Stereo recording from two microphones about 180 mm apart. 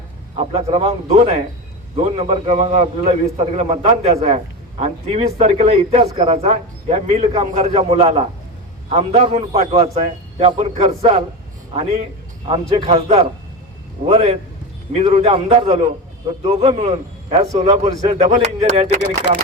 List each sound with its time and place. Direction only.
0.3 s a man's voice: 35° right (ahead or behind)
14.1 s a man's voice: 35° right (ahead or behind)